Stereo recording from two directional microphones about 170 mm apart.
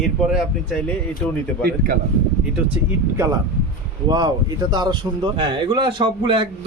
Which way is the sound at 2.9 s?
15° right (ahead or behind).